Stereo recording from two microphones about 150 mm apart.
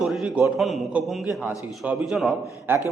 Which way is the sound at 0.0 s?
5° right (ahead or behind).